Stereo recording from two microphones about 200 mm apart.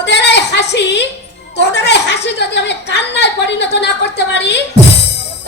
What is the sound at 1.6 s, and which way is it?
Chuckle, 60° left (ahead or behind).